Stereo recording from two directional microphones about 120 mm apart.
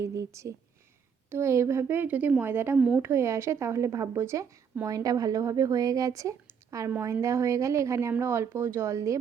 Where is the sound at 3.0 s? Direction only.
20° right (ahead or behind).